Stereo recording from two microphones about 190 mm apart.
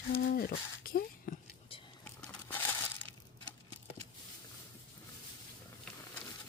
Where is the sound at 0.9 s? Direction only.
50° left (ahead or behind).